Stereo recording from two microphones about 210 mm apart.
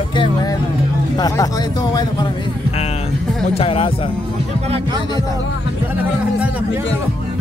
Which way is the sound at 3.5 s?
25° left (ahead or behind).